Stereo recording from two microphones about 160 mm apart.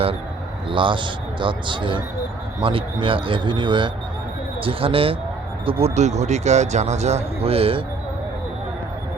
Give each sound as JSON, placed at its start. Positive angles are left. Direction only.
{"t": 0.7, "sound": "speech", "side_deg": -30}
{"t": 5.8, "sound": "a man's voice", "side_deg": -45}